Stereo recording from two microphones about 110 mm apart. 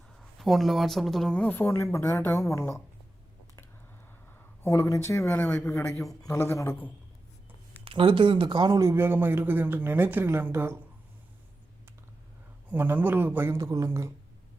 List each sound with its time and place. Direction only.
0.2 s speech: centre (ahead or behind)
1.5 s a woman's voice: 20° left (ahead or behind)
4.6 s a woman's voice: 25° left (ahead or behind)
7.9 s speech: 50° right (ahead or behind)
8.8 s speech: 25° right (ahead or behind)
12.7 s speech: 15° right (ahead or behind)